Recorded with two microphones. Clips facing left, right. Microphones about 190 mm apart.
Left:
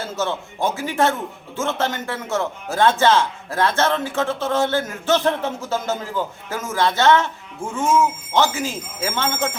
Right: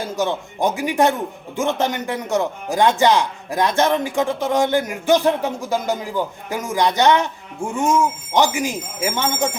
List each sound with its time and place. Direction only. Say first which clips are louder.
0.0 s a man's voice: right 3 dB; 15° right (ahead or behind)